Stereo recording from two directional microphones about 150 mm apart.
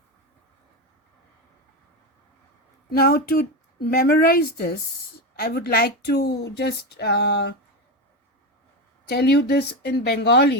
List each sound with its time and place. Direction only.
2.9 s speech: 90° left
9.0 s speech: 90° left